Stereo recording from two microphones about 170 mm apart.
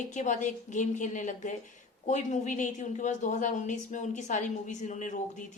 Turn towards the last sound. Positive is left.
turn(degrees=50)  # may be behind; listen again after turning